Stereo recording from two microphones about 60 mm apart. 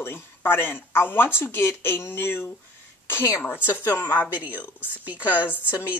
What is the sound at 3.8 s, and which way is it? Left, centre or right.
Speech, left.